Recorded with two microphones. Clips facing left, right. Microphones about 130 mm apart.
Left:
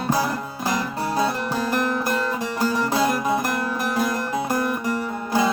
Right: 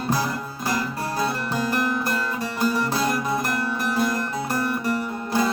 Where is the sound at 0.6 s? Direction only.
20° left (ahead or behind).